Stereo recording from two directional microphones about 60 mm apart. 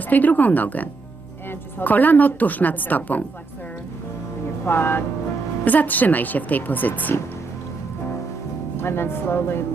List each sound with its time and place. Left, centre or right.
0.1 s speech: left
4.6 s speech: left
8.7 s speech: left